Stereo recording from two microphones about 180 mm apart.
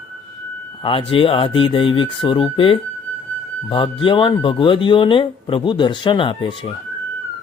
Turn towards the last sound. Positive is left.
turn(degrees=30)  # may be behind; listen again after turning